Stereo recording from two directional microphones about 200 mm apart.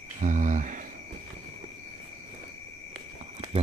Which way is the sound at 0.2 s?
40° right (ahead or behind).